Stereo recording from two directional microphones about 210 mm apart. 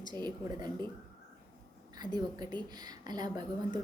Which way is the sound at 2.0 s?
20° right (ahead or behind).